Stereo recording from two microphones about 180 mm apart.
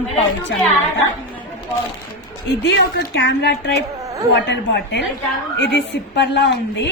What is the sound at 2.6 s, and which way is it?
A woman's voice, 70° left (ahead or behind).